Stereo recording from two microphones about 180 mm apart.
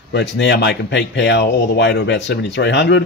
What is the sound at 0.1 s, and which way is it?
Speech, 75° left (ahead or behind).